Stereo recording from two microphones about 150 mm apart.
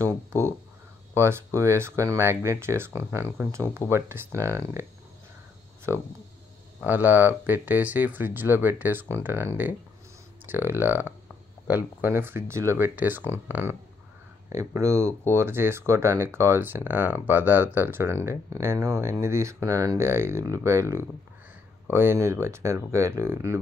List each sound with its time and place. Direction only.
1.1 s speech: 20° right (ahead or behind)
6.8 s speech: 10° right (ahead or behind)